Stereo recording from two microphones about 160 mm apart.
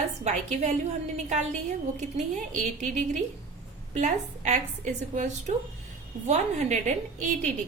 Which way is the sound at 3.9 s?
50° right (ahead or behind).